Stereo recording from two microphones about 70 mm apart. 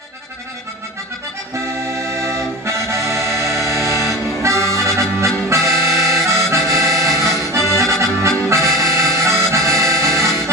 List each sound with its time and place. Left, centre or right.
1.9 s accordion: right
8.4 s music: right